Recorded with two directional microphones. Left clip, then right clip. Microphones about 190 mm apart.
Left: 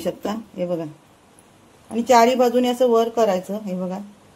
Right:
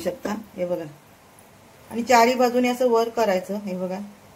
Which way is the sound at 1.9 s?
45° left (ahead or behind).